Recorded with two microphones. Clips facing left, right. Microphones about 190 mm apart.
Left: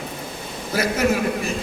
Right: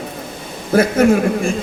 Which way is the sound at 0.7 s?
50° right (ahead or behind).